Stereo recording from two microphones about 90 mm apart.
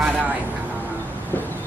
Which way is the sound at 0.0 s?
15° right (ahead or behind).